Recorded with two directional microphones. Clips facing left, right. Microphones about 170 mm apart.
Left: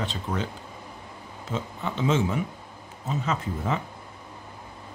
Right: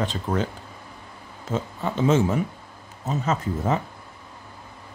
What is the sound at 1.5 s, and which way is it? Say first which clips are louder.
Speech: right 4 dB; 45° right (ahead or behind).